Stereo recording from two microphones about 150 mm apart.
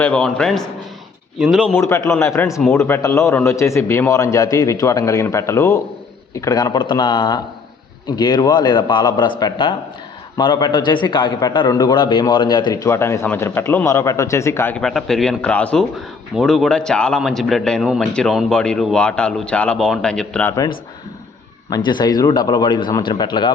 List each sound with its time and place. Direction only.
0.0 s speech: 5° left (ahead or behind)
1.7 s a man's voice: 20° left (ahead or behind)
14.8 s speech: 5° left (ahead or behind)
21.8 s a man's voice: 30° left (ahead or behind)